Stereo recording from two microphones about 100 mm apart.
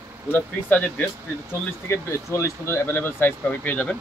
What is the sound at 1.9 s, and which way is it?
Speech, 30° left (ahead or behind).